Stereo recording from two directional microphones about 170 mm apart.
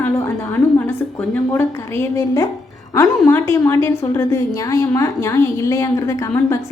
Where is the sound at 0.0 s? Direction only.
10° left (ahead or behind).